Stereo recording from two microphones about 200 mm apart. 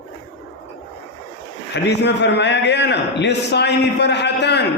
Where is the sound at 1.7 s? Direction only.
60° left (ahead or behind).